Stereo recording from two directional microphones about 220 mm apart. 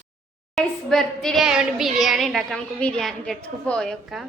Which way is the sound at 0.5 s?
Centre (ahead or behind).